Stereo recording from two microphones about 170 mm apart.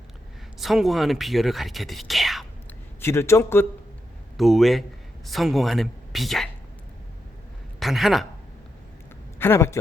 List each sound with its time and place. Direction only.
0.6 s speech: centre (ahead or behind)
2.6 s a man's voice: 15° left (ahead or behind)
4.4 s speech: centre (ahead or behind)
7.8 s speech: centre (ahead or behind)
9.4 s a man's voice: 15° left (ahead or behind)